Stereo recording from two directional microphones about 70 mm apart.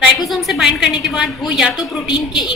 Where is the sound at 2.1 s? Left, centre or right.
Left.